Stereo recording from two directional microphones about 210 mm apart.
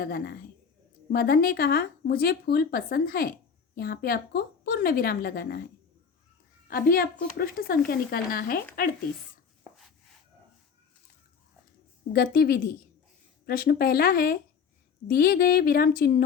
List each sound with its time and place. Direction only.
0.0 s speech: 45° left (ahead or behind)
6.7 s speech: 45° left (ahead or behind)
12.1 s speech: 45° left (ahead or behind)